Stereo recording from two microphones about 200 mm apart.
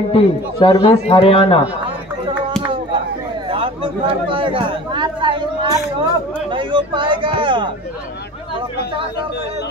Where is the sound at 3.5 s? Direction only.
25° right (ahead or behind).